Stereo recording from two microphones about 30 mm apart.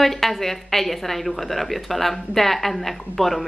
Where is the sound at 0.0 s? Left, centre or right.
Centre.